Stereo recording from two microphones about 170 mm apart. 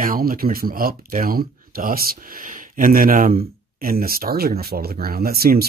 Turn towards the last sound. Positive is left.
turn(degrees=-65)  # may be behind; listen again after turning